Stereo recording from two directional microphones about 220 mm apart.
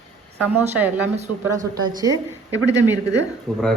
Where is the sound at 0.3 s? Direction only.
10° right (ahead or behind).